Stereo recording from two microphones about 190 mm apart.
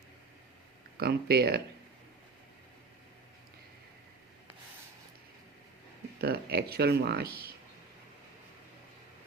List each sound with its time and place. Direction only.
0.9 s speech: 55° right (ahead or behind)
6.1 s speech: 55° right (ahead or behind)